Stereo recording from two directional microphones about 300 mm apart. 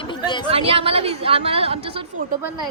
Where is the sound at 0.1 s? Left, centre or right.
Centre.